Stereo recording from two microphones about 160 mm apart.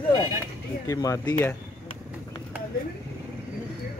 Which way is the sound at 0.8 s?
20° left (ahead or behind).